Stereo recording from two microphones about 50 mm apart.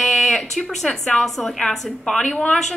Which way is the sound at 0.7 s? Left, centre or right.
Centre.